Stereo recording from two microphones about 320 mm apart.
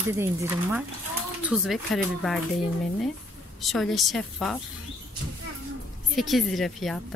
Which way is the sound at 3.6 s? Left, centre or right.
Centre.